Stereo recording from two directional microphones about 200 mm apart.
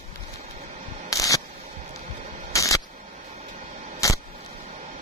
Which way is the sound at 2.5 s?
15° left (ahead or behind).